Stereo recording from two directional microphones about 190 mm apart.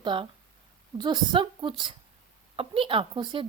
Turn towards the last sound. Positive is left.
turn(degrees=-25)  # may be behind; listen again after turning